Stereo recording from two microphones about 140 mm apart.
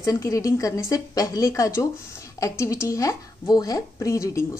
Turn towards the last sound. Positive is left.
turn(degrees=20)  # may be behind; listen again after turning